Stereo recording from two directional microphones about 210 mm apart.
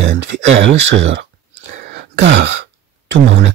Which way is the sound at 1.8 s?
50° right (ahead or behind).